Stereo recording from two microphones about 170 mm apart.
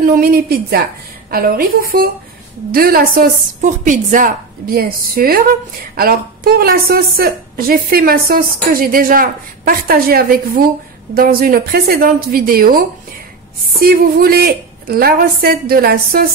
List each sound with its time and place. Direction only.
0.0 s a woman's voice: 55° right (ahead or behind)
3.6 s a woman's voice: 50° right (ahead or behind)